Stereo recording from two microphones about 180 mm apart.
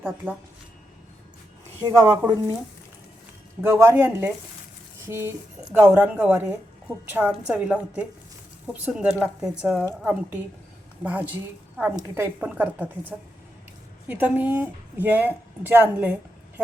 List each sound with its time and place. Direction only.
1.8 s speech: 20° right (ahead or behind)
3.6 s a woman's voice: 15° right (ahead or behind)